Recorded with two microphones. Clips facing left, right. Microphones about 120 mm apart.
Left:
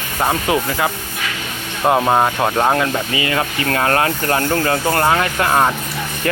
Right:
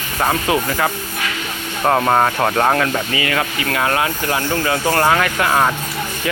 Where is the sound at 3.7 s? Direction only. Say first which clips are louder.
Left 3 dB; 35° left (ahead or behind).